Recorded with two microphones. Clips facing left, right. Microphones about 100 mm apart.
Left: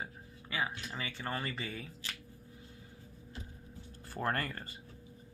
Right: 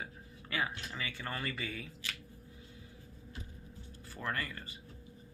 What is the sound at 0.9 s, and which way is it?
Speech, 30° left (ahead or behind).